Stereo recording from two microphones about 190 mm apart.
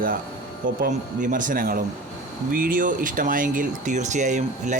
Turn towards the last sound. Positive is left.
turn(degrees=-40)  # may be behind; listen again after turning